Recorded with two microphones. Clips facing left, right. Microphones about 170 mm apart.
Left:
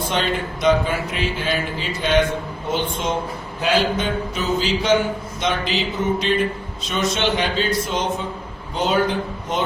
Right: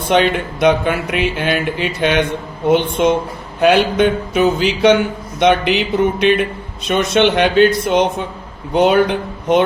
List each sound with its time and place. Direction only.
0.1 s a man's voice: 65° right (ahead or behind)